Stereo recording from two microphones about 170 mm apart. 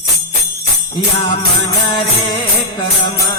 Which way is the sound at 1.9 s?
30° left (ahead or behind).